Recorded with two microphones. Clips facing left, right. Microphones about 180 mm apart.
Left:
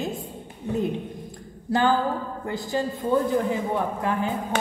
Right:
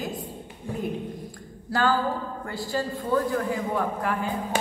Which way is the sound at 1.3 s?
20° left (ahead or behind).